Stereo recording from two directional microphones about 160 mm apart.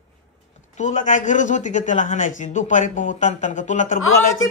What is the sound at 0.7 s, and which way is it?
A man's voice, 50° left (ahead or behind).